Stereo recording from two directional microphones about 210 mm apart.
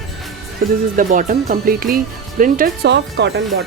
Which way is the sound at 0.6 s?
45° right (ahead or behind).